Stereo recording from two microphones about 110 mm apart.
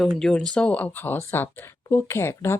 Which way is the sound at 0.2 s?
5° left (ahead or behind).